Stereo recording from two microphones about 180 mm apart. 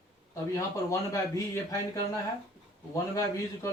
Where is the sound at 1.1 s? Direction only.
15° left (ahead or behind).